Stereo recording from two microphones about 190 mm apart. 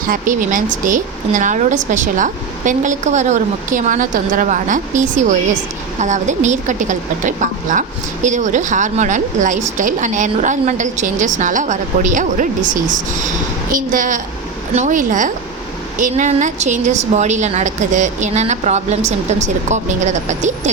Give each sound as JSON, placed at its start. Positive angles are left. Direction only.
{"t": 0.1, "sound": "a woman's voice", "side_deg": -45}